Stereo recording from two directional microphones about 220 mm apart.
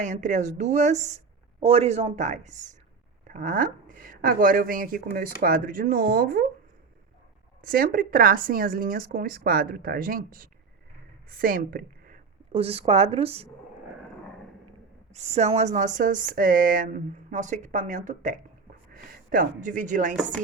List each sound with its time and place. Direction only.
0.0 s a woman's voice: 35° right (ahead or behind)
7.6 s a woman's voice: 40° right (ahead or behind)
12.5 s speech: 25° right (ahead or behind)
15.1 s a woman's voice: 30° right (ahead or behind)